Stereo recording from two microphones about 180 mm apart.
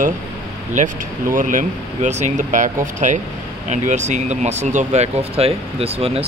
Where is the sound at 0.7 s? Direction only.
45° right (ahead or behind).